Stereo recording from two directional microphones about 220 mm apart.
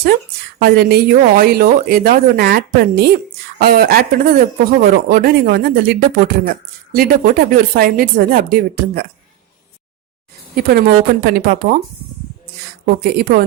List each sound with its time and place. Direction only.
0.6 s speech: 45° right (ahead or behind)
10.5 s speech: 45° right (ahead or behind)
12.8 s speech: 45° right (ahead or behind)